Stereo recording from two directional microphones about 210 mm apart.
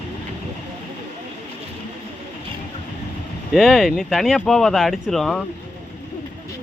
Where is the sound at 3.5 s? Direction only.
Centre (ahead or behind).